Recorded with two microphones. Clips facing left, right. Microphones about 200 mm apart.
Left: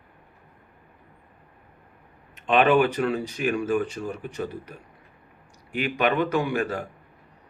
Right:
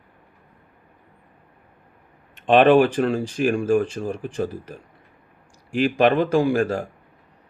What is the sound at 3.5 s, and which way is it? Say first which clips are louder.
Speech: right 4 dB; 50° right (ahead or behind).